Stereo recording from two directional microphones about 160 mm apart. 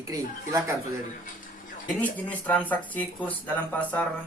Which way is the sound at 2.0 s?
10° left (ahead or behind).